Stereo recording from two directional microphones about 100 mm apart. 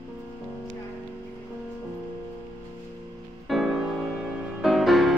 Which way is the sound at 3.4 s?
Centre (ahead or behind).